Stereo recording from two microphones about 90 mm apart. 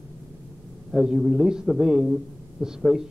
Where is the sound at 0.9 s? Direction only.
5° right (ahead or behind).